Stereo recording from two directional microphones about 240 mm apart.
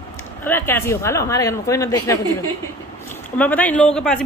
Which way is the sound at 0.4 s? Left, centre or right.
Centre.